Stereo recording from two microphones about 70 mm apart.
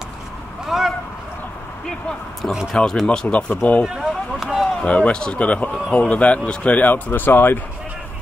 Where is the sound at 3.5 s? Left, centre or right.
Left.